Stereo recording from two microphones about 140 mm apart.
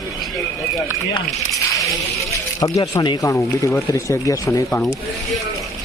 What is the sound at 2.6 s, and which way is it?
Speech, 25° left (ahead or behind).